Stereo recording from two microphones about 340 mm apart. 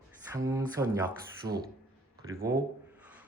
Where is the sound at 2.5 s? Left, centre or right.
Centre.